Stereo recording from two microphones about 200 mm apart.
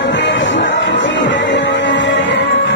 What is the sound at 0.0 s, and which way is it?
Music, 65° left (ahead or behind).